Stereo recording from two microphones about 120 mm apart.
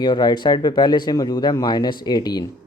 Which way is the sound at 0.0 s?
40° left (ahead or behind).